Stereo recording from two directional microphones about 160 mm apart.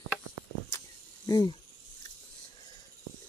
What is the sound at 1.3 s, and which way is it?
Speech, 25° left (ahead or behind).